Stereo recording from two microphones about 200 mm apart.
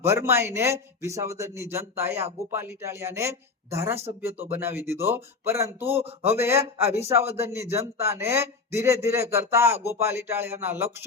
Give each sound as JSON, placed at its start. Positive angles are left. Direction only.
{"t": 0.0, "sound": "a man's voice", "side_deg": -15}
{"t": 6.0, "sound": "speech", "side_deg": -30}
{"t": 6.3, "sound": "a man's voice", "side_deg": -10}
{"t": 6.8, "sound": "speech", "side_deg": -30}
{"t": 7.3, "sound": "a man's voice", "side_deg": -15}